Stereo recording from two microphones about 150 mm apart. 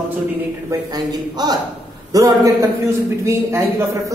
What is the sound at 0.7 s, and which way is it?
A man's voice, 25° right (ahead or behind).